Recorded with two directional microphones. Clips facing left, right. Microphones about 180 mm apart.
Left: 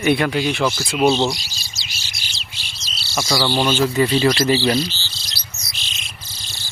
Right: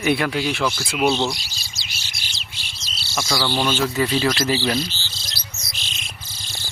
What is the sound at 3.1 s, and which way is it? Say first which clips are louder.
Speech: left 3 dB; 5° left (ahead or behind).